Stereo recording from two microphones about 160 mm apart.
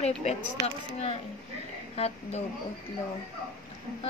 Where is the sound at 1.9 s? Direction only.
40° left (ahead or behind).